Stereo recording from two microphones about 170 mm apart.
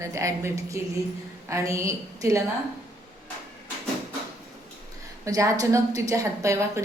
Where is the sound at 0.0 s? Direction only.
20° right (ahead or behind).